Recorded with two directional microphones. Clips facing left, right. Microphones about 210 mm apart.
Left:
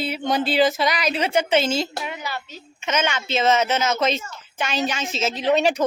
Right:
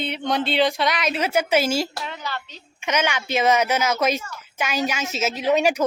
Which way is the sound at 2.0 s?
15° left (ahead or behind).